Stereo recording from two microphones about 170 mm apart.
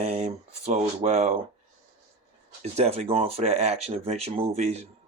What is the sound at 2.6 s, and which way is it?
Speech, 40° right (ahead or behind).